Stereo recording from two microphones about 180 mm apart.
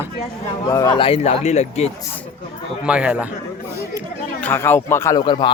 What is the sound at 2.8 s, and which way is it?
Speech, 5° right (ahead or behind).